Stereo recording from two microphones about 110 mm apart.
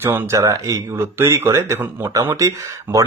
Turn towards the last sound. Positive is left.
turn(degrees=-30)  # may be behind; listen again after turning